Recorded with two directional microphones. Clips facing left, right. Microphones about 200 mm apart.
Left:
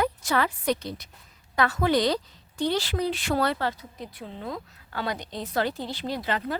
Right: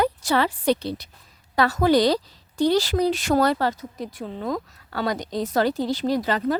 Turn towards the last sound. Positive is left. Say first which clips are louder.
# right 7 dB
turn(degrees=-40)  # may be behind; listen again after turning